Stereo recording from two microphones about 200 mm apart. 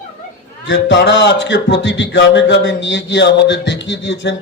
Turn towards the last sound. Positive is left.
turn(degrees=65)  # may be behind; listen again after turning